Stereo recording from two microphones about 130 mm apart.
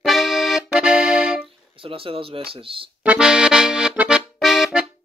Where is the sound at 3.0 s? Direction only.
5° right (ahead or behind).